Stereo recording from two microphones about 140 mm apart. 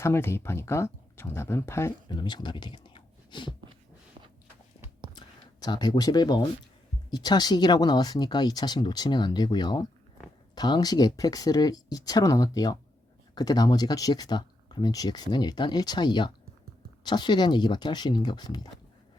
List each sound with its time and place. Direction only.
0.0 s speech: 20° left (ahead or behind)
2.0 s speech: 30° left (ahead or behind)
5.1 s a sound: 30° left (ahead or behind)
7.1 s speech: 30° left (ahead or behind)